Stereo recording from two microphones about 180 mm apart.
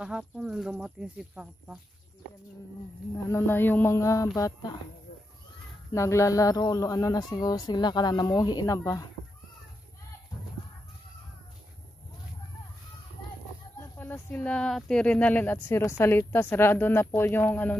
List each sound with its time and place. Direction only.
0.0 s speech: 5° right (ahead or behind)
3.3 s speech: 10° left (ahead or behind)
5.9 s speech: 15° left (ahead or behind)
13.9 s speech: 10° left (ahead or behind)